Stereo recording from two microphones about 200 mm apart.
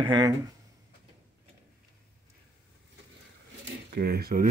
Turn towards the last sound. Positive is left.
turn(degrees=-50)  # may be behind; listen again after turning